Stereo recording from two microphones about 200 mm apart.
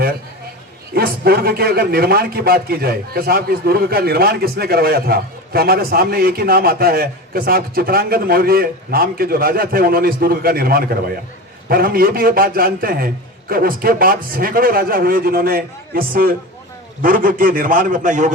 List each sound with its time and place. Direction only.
0.9 s a man's voice: 50° right (ahead or behind)